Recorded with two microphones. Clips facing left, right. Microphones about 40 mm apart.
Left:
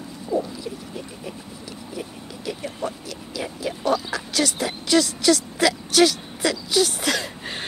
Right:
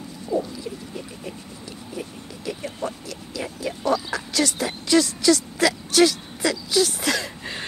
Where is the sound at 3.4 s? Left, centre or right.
Left.